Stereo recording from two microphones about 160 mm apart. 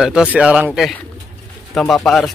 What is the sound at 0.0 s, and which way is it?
Speech, 5° right (ahead or behind).